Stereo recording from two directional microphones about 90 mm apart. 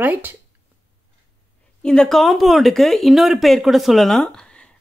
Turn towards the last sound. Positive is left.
turn(degrees=10)  # may be behind; listen again after turning